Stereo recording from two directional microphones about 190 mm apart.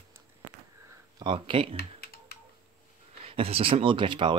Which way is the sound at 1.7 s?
55° left (ahead or behind).